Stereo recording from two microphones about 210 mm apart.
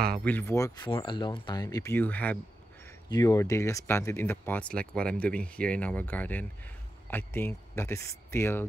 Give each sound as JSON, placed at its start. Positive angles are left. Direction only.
{"t": 0.2, "sound": "speech", "side_deg": 10}